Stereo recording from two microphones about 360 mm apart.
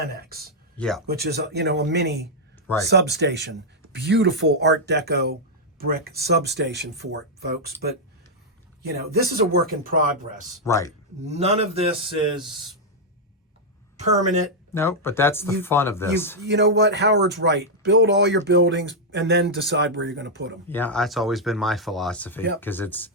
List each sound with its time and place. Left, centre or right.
0.2 s speech: right
0.8 s speech: centre
1.0 s speech: right
10.6 s speech: centre
11.3 s a man's voice: centre
13.9 s speech: centre
14.7 s speech: centre
16.4 s speech: right
20.7 s speech: centre